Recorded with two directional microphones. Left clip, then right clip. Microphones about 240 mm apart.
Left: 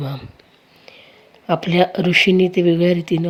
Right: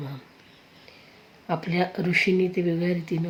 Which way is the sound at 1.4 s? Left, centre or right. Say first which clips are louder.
Left 10 dB; left.